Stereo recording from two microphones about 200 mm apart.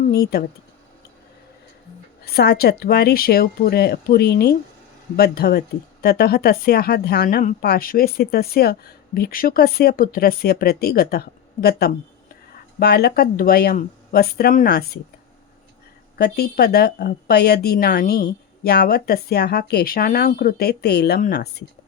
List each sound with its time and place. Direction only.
0.1 s speech: 50° left (ahead or behind)
2.2 s speech: 50° left (ahead or behind)
12.5 s speech: 50° left (ahead or behind)
16.1 s speech: 50° left (ahead or behind)